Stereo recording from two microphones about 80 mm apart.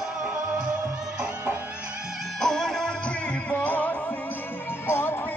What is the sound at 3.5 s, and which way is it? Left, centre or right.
Music, centre.